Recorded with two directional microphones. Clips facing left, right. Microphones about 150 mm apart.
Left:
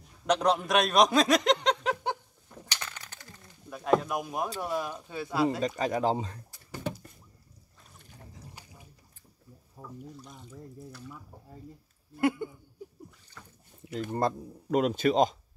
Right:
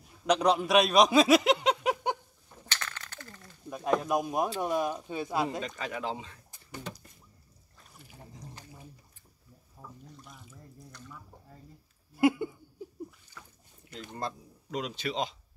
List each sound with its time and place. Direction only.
0.3 s a man's voice: centre (ahead or behind)
2.7 s coin: 15° left (ahead or behind)
4.0 s speech: 20° right (ahead or behind)
5.8 s speech: 40° left (ahead or behind)
9.8 s a sound: 15° left (ahead or behind)
10.1 s speech: centre (ahead or behind)
12.2 s a sound: 10° right (ahead or behind)
13.9 s speech: 50° left (ahead or behind)